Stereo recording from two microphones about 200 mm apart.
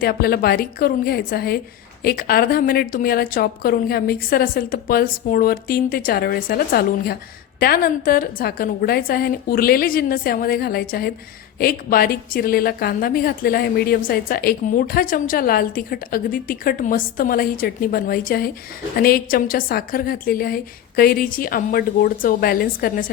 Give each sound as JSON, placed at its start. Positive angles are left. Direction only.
{"t": 0.0, "sound": "a woman's voice", "side_deg": 50}